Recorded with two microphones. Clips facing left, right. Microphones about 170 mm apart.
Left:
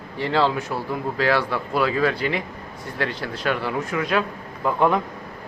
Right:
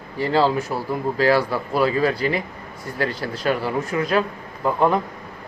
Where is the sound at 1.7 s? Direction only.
40° right (ahead or behind).